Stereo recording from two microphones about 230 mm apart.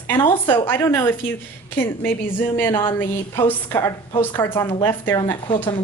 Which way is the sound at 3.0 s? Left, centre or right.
Centre.